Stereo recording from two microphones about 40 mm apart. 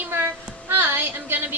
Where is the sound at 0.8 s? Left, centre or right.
Right.